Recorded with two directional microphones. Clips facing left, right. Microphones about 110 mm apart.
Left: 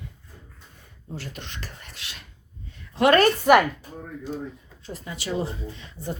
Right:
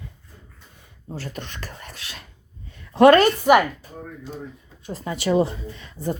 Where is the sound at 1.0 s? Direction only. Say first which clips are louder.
Right 4 dB; 40° right (ahead or behind).